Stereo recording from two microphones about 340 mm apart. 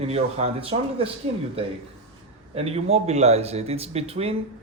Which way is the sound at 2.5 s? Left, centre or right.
Centre.